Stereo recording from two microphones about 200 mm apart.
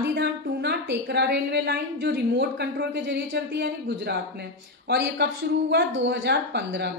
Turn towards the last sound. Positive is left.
turn(degrees=-55)  # may be behind; listen again after turning